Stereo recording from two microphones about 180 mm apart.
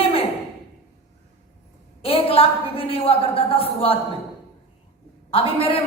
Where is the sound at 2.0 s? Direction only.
30° left (ahead or behind).